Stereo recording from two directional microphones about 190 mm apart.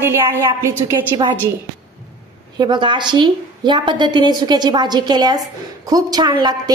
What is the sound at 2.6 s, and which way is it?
A woman's voice, 25° right (ahead or behind).